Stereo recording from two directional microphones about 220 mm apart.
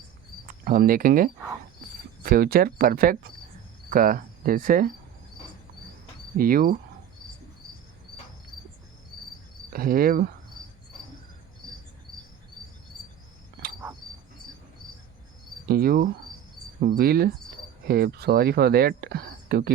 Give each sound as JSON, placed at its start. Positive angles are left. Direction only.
{"t": 0.4, "sound": "speech", "side_deg": -40}
{"t": 3.8, "sound": "cricket", "side_deg": -40}
{"t": 6.3, "sound": "speech", "side_deg": -40}
{"t": 9.7, "sound": "speech", "side_deg": -40}
{"t": 13.6, "sound": "cricket", "side_deg": -45}
{"t": 15.6, "sound": "speech", "side_deg": -45}